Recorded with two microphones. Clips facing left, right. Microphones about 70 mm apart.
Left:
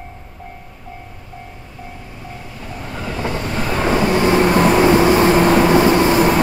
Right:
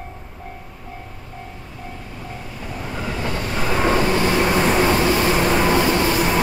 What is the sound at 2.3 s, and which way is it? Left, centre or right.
Vehicle, centre.